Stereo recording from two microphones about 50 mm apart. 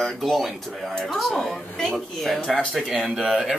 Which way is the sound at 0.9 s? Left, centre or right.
Centre.